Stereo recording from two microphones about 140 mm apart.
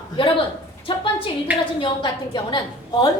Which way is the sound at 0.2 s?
40° left (ahead or behind).